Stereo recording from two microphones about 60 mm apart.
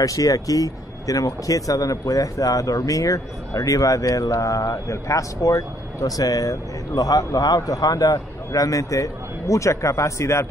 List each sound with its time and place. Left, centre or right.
0.0 s speech: left